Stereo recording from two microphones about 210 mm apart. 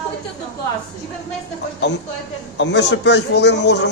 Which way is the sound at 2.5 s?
55° left (ahead or behind).